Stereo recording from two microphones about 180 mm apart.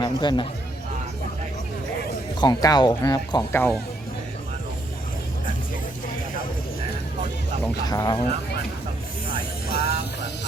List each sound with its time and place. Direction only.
0.0 s speech: 25° left (ahead or behind)
2.4 s speech: 20° left (ahead or behind)
7.9 s speech: 20° left (ahead or behind)
9.6 s music: 60° left (ahead or behind)